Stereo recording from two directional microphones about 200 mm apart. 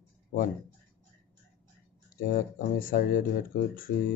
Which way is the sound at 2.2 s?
45° left (ahead or behind).